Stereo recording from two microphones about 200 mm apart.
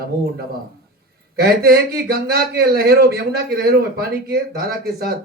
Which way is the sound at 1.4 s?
50° right (ahead or behind).